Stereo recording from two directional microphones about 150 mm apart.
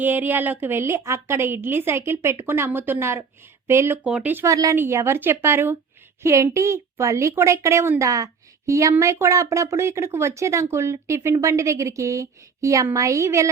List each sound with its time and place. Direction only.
0.0 s a woman's voice: 10° right (ahead or behind)